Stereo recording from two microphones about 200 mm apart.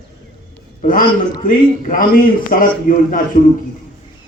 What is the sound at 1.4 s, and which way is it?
A man's voice, 40° left (ahead or behind).